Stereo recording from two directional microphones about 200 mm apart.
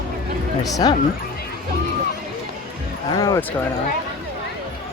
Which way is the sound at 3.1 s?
15° left (ahead or behind).